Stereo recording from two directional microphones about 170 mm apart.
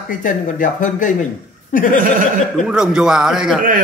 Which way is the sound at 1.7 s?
50° left (ahead or behind).